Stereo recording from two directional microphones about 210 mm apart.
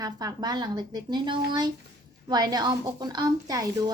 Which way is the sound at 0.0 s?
15° right (ahead or behind).